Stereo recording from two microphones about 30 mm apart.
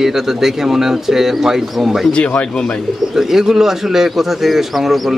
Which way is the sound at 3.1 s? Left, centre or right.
Centre.